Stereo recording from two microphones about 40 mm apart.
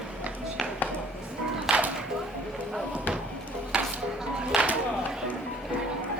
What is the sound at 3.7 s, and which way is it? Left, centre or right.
Music, right.